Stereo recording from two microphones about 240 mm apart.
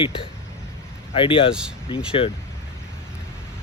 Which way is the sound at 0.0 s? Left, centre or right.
Left.